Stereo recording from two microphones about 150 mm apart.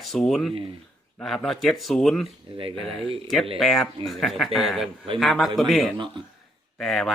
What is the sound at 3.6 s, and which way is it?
Speech, centre (ahead or behind).